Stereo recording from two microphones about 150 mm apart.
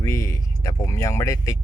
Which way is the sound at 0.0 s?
20° left (ahead or behind).